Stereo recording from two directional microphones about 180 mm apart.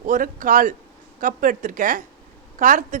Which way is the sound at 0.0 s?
45° right (ahead or behind).